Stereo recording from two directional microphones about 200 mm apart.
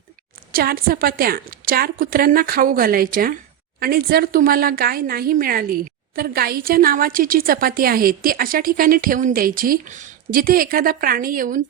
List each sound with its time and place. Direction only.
0.5 s speech: 50° right (ahead or behind)